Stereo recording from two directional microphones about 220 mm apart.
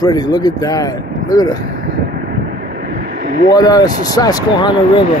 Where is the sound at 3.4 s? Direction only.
15° left (ahead or behind).